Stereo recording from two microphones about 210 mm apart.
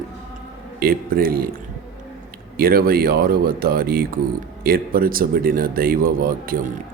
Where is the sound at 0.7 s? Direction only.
45° right (ahead or behind).